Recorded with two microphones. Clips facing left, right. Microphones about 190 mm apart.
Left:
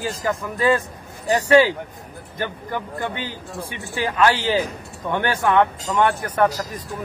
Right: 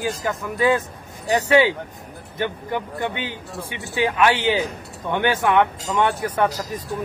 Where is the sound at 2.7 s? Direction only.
20° right (ahead or behind).